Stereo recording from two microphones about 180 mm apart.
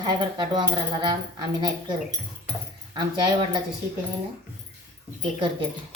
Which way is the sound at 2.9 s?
25° right (ahead or behind).